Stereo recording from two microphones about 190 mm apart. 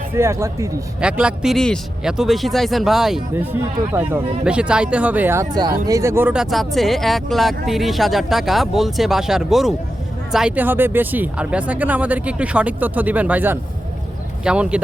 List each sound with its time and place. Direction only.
0.2 s speech: 15° right (ahead or behind)
1.0 s speech: 5° right (ahead or behind)